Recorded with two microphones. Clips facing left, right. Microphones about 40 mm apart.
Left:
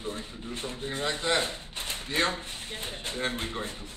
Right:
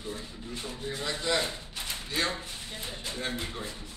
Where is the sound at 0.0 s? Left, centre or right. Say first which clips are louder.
Left 2 dB; left.